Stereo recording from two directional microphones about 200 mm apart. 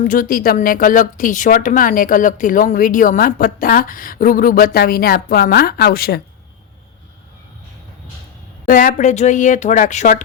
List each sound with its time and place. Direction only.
0.0 s a woman's voice: 45° left (ahead or behind)
8.6 s speech: 45° left (ahead or behind)